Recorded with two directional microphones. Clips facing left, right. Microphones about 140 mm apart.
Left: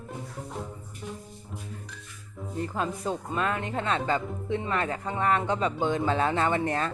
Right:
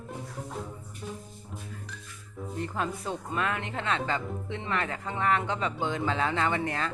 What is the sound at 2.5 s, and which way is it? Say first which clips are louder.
Speech: left 2 dB; 25° left (ahead or behind).